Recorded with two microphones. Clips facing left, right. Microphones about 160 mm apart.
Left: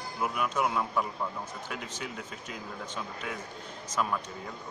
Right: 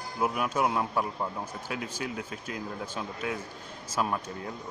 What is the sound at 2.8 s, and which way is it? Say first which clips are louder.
Speech: right 3 dB; 10° right (ahead or behind).